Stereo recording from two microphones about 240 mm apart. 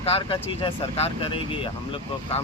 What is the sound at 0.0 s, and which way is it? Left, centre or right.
Speech, left.